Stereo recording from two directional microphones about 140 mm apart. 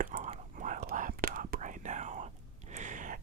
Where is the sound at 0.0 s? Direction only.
80° right.